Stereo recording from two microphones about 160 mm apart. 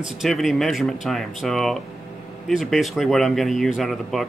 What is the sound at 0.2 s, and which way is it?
Speech, centre (ahead or behind).